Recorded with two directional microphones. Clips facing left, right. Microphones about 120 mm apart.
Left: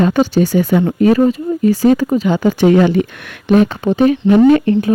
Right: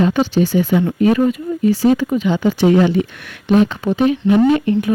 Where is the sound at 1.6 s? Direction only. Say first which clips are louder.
Left 2 dB; 45° left (ahead or behind).